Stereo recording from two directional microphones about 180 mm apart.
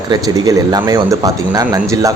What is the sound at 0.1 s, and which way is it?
Speech, 20° right (ahead or behind).